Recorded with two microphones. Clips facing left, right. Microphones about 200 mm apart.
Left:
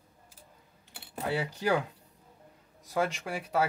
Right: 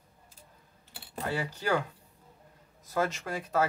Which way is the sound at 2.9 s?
15° left (ahead or behind).